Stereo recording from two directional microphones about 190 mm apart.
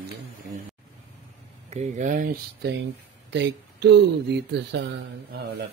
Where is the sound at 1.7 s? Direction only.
40° right (ahead or behind).